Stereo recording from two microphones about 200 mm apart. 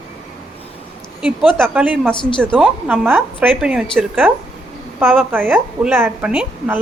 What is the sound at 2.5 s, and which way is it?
A woman's voice, 10° right (ahead or behind).